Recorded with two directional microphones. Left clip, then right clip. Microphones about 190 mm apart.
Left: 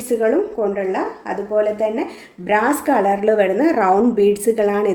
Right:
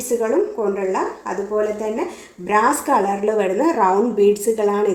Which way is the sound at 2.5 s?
30° left (ahead or behind).